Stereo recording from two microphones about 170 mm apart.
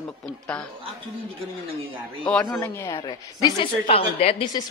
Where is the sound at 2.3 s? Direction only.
5° left (ahead or behind).